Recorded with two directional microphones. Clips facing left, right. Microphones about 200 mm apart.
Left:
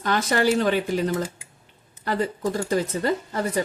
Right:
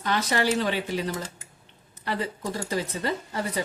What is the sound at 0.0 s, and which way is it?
Speech, 50° left (ahead or behind).